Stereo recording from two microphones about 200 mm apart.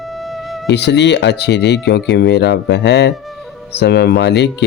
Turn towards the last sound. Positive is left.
turn(degrees=60)  # may be behind; listen again after turning